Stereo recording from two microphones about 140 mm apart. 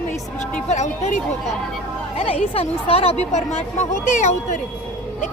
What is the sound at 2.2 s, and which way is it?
A woman's voice, 45° left (ahead or behind).